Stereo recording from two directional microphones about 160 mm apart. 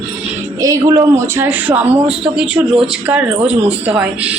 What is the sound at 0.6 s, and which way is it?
A woman's voice, 20° right (ahead or behind).